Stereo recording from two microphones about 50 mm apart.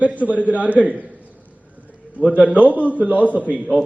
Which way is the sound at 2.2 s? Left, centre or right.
Right.